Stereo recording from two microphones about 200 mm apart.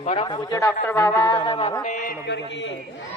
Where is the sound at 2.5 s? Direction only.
65° left (ahead or behind).